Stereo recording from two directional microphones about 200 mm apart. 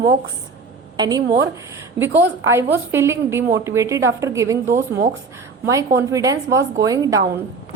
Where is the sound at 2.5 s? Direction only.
15° right (ahead or behind).